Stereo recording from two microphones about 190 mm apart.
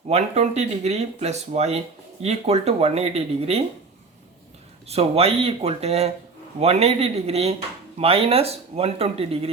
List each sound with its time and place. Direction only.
0.1 s speech: 35° right (ahead or behind)
4.9 s speech: 30° right (ahead or behind)